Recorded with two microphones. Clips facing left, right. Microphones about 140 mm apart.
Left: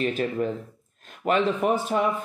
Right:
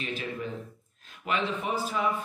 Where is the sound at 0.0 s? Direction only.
50° left (ahead or behind).